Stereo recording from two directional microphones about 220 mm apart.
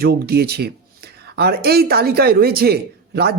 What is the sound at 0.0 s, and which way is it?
Speech, 45° right (ahead or behind).